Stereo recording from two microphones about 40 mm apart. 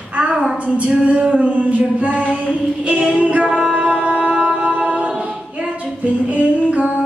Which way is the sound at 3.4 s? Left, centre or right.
Centre.